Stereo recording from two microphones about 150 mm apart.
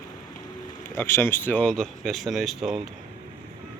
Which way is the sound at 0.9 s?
15° left (ahead or behind).